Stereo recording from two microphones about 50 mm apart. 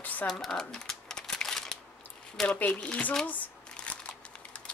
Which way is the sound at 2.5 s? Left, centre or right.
Left.